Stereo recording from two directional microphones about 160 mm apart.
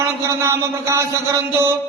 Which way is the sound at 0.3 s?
15° right (ahead or behind).